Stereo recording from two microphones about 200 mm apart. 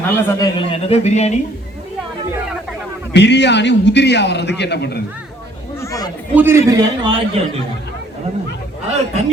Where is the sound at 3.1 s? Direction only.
60° left (ahead or behind).